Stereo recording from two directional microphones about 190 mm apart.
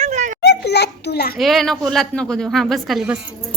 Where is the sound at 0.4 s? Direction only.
60° left (ahead or behind).